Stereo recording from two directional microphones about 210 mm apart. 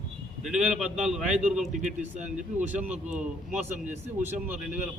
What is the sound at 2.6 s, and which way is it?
Speech, 5° right (ahead or behind).